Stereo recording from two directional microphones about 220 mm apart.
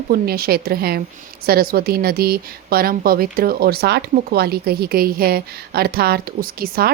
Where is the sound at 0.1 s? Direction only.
45° right (ahead or behind).